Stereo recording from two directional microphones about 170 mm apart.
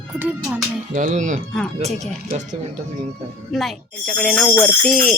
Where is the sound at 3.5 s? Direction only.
Centre (ahead or behind).